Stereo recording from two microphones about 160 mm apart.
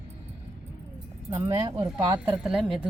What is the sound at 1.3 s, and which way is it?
Speech, 20° right (ahead or behind).